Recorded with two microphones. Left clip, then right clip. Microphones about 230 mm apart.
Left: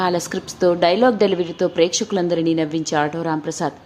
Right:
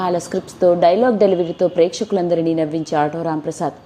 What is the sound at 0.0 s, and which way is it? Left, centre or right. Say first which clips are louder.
A woman's voice: right 1 dB; centre.